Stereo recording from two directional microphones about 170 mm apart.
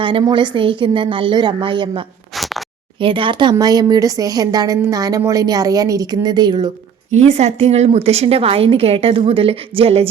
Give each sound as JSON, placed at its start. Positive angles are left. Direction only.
{"t": 0.0, "sound": "speech", "side_deg": -30}
{"t": 2.3, "sound": "a sound", "side_deg": 0}
{"t": 3.0, "sound": "speech", "side_deg": -30}
{"t": 7.3, "sound": "a woman's voice", "side_deg": -40}